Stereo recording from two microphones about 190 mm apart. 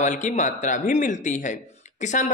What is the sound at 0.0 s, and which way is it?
A man's voice, 40° left (ahead or behind).